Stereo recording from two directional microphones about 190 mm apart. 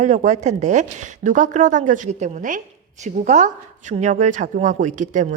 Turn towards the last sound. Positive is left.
turn(degrees=-40)  # may be behind; listen again after turning